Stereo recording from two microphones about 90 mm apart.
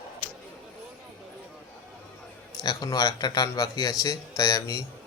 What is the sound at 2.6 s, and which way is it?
Speech, 45° left (ahead or behind).